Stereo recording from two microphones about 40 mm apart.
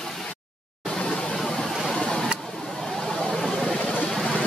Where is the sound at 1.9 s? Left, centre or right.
Centre.